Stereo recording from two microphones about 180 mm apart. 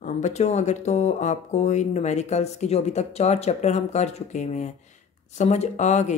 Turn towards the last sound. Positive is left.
turn(degrees=40)  # may be behind; listen again after turning